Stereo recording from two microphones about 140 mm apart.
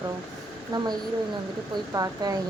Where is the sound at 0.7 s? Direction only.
30° right (ahead or behind).